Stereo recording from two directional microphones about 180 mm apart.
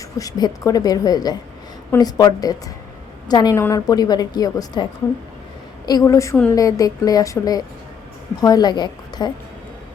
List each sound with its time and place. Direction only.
0.2 s a woman's voice: 20° left (ahead or behind)